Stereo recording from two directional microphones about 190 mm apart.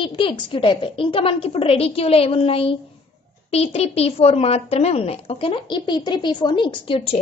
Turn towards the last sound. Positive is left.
turn(degrees=30)  # may be behind; listen again after turning